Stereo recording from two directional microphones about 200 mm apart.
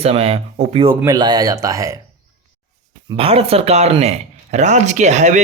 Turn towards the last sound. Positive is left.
turn(degrees=-35)  # may be behind; listen again after turning